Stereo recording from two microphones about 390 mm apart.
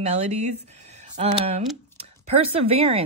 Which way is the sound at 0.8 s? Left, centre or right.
Centre.